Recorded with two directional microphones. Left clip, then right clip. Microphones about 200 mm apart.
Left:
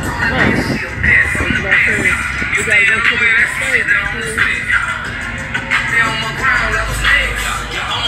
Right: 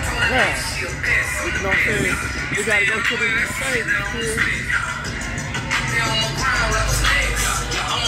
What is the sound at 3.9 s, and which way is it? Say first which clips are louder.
Music: left 6 dB; 65° right (ahead or behind).